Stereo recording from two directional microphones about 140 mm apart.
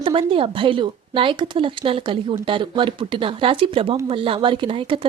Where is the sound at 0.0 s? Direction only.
40° right (ahead or behind).